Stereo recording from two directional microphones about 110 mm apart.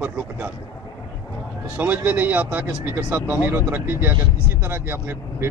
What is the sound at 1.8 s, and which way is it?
Speech, 15° right (ahead or behind).